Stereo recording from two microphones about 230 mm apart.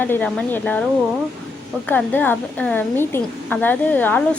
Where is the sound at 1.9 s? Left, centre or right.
Centre.